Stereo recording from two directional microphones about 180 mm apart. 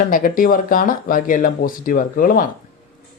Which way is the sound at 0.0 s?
50° left (ahead or behind).